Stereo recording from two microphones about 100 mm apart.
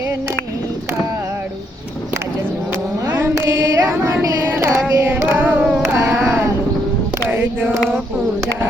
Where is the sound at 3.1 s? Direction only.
25° right (ahead or behind).